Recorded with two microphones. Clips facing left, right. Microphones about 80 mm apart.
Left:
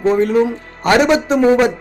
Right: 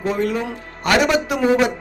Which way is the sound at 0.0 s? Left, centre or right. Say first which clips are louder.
Left 8 dB; left.